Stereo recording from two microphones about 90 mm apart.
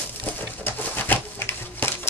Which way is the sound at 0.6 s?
20° left (ahead or behind).